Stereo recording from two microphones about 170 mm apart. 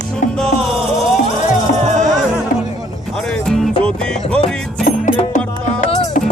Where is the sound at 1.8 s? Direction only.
45° right (ahead or behind).